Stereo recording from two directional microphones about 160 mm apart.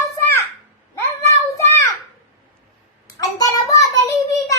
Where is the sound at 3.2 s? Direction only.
20° left (ahead or behind).